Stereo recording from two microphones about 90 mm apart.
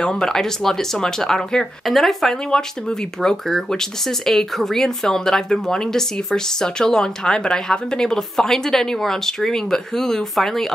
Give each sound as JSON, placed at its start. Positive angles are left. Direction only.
{"t": 0.0, "sound": "speech", "side_deg": 5}